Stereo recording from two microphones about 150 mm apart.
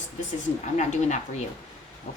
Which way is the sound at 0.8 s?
55° left (ahead or behind).